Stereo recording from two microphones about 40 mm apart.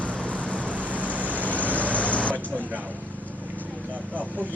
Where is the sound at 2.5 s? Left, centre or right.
Right.